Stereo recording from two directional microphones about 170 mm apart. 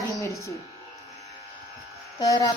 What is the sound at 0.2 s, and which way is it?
Electric shaver, 15° left (ahead or behind).